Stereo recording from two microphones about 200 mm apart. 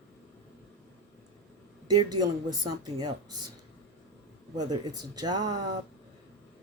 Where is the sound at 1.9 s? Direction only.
20° right (ahead or behind).